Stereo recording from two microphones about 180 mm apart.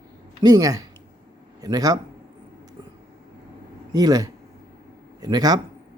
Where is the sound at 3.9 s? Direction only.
20° right (ahead or behind).